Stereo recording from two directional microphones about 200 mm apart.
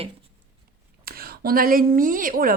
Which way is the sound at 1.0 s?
50° right (ahead or behind).